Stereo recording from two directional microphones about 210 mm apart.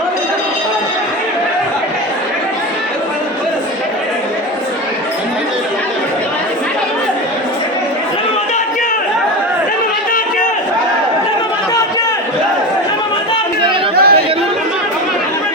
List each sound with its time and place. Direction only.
13.9 s chatter: 50° right (ahead or behind)